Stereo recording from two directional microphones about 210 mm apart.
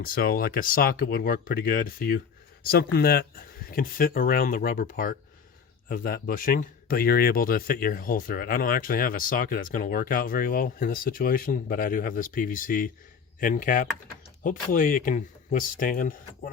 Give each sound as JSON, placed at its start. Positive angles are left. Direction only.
{"t": 0.0, "sound": "speech", "side_deg": 45}